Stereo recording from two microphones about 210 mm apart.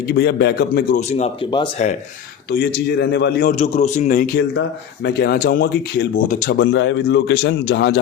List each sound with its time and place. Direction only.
0.1 s a man's voice: 55° left (ahead or behind); by 1.7 s 25° left (ahead or behind)
2.5 s a man's voice: 50° left (ahead or behind)
3.5 s a man's voice: 35° left (ahead or behind)
5.0 s a man's voice: 45° left (ahead or behind)
6.6 s a man's voice: 60° left (ahead or behind)